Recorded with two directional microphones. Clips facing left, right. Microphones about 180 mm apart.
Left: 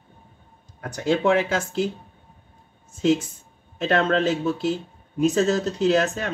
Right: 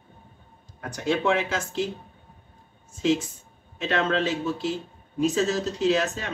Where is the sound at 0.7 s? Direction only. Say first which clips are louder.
Left 3 dB; 50° left (ahead or behind).